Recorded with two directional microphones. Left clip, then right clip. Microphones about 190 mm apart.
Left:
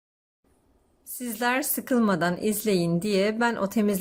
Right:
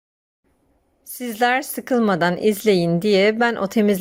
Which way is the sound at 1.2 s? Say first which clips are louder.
Right 7 dB; 25° right (ahead or behind).